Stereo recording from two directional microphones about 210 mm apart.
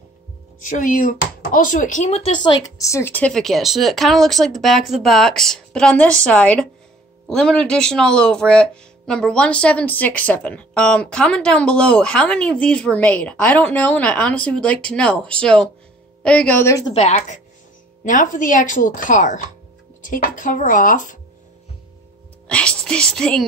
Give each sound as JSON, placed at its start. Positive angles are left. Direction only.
{"t": 0.7, "sound": "speech", "side_deg": 40}
{"t": 16.9, "sound": "speech", "side_deg": 35}
{"t": 22.5, "sound": "speech", "side_deg": 5}